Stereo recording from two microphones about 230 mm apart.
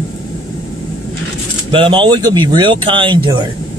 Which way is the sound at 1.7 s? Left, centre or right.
Right.